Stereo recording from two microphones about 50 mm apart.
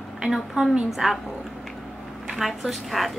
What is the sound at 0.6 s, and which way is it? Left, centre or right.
Speech, centre.